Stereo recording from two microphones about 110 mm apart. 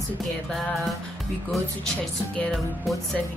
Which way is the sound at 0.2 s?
Centre (ahead or behind).